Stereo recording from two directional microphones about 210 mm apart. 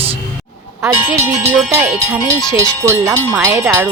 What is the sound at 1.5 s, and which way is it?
Speech, 10° right (ahead or behind).